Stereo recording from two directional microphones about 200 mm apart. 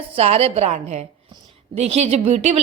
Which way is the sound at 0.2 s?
30° right (ahead or behind).